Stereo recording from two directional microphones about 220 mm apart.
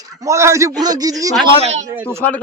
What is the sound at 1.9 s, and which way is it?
Speech, 10° right (ahead or behind).